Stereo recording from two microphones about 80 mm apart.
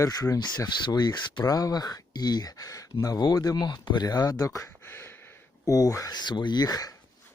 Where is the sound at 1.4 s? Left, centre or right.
Left.